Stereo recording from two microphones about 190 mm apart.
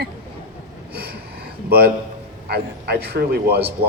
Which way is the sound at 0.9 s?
55° right (ahead or behind).